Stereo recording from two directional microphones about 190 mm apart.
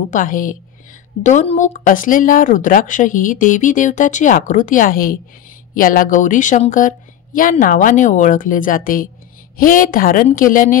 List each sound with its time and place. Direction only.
0.1 s speech: 45° left (ahead or behind)